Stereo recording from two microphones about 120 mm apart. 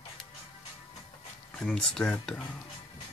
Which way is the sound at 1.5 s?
5° left (ahead or behind).